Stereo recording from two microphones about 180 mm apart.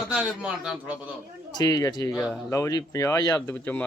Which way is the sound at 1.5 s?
20° left (ahead or behind).